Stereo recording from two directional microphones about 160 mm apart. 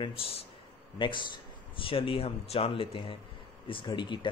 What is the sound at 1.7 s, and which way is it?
Speech, 35° left (ahead or behind).